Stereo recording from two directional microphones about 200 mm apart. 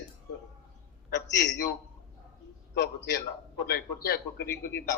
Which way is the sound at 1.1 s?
60° left (ahead or behind).